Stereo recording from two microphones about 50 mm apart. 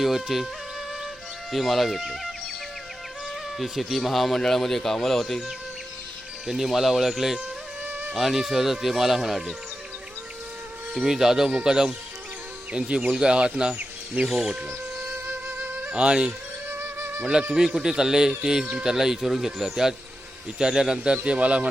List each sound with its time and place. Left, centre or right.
0.0 s speech: centre
1.5 s speech: centre
3.6 s speech: centre
6.5 s speech: centre
7.9 s music: right
8.1 s speech: centre
10.9 s speech: centre
13.1 s speech: centre
15.1 s music: right
16.6 s music: right
17.5 s speech: centre
18.6 s a man's voice: right
18.9 s a man's voice: centre; by 21.7 s right